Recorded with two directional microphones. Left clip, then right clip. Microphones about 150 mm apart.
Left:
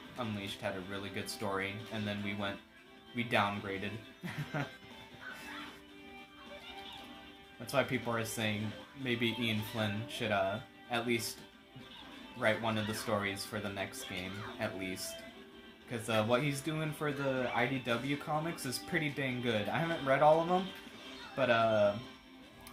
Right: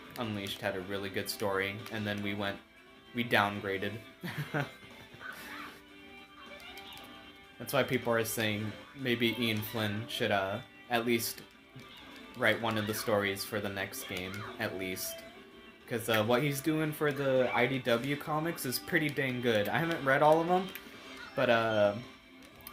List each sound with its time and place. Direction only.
0.2 s speech: 35° right (ahead or behind)
7.7 s speech: 40° right (ahead or behind)
12.4 s speech: 35° right (ahead or behind)